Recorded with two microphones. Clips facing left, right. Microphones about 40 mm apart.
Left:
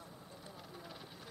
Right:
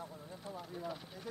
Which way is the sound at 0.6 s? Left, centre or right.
Centre.